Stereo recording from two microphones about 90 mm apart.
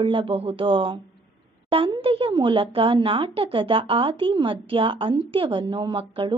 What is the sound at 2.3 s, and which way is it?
A woman's voice, 60° right (ahead or behind).